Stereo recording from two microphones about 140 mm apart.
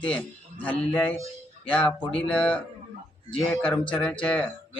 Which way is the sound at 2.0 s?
40° left (ahead or behind).